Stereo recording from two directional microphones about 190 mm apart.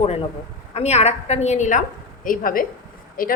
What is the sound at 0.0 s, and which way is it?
A woman's voice, 35° left (ahead or behind).